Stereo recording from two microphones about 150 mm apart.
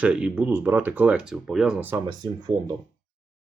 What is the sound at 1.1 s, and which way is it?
Speech, centre (ahead or behind).